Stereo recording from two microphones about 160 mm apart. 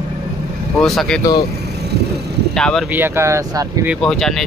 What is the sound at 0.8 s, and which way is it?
Speech, centre (ahead or behind).